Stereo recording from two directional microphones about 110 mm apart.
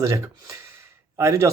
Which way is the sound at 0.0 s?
30° right (ahead or behind).